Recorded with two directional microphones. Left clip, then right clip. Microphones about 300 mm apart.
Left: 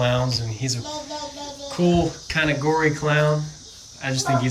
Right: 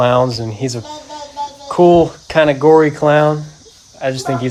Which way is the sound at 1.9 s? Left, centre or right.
Centre.